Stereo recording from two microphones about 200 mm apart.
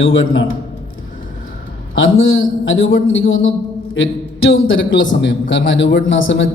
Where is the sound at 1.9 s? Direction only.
80° left.